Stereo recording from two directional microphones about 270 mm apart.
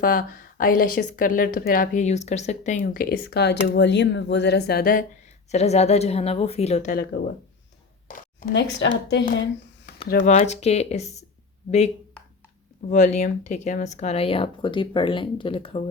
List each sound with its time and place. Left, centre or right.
0.0 s speech: left
12.9 s speech: left